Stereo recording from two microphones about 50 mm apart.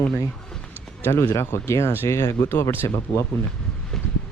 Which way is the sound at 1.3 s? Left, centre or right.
Left.